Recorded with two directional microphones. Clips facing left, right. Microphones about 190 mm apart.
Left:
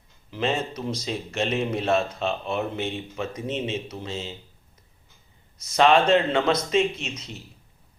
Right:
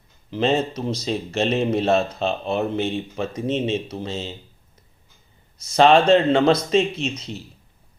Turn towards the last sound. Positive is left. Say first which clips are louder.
# right 2 dB
turn(degrees=-30)  # may be behind; listen again after turning